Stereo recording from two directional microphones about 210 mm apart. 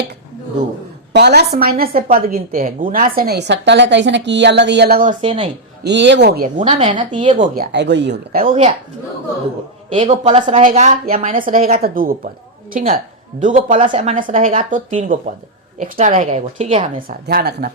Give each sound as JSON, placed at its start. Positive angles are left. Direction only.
{"t": 1.1, "sound": "a woman's voice", "side_deg": -50}
{"t": 5.2, "sound": "a woman's voice", "side_deg": -25}
{"t": 5.8, "sound": "a woman's voice", "side_deg": -55}
{"t": 6.7, "sound": "a woman's voice", "side_deg": -30}
{"t": 7.3, "sound": "a woman's voice", "side_deg": -45}
{"t": 9.9, "sound": "a woman's voice", "side_deg": -25}
{"t": 13.9, "sound": "a woman's voice", "side_deg": -25}
{"t": 14.2, "sound": "a woman's voice", "side_deg": -40}
{"t": 17.2, "sound": "a woman's voice", "side_deg": -50}